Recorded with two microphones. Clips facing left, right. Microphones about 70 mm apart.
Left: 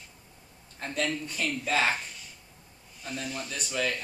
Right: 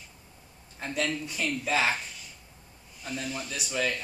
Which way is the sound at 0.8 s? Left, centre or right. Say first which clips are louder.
Even; centre.